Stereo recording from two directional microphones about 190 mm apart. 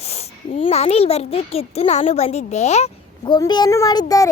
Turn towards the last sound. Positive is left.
turn(degrees=20)  # may be behind; listen again after turning